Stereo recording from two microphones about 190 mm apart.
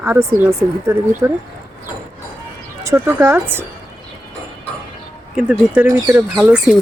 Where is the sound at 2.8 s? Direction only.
15° right (ahead or behind).